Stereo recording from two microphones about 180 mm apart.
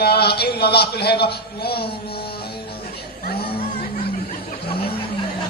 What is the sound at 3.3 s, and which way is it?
Music, 60° left (ahead or behind).